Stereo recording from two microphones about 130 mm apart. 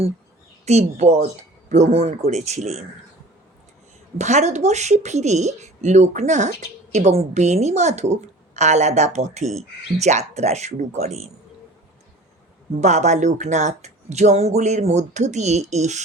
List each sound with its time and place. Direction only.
0.6 s a woman's voice: 60° right (ahead or behind)
4.2 s a woman's voice: 60° right (ahead or behind)
12.8 s a woman's voice: 65° right (ahead or behind)